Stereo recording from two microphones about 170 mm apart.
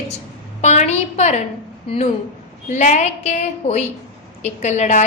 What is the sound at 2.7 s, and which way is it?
A woman's voice, 45° left (ahead or behind).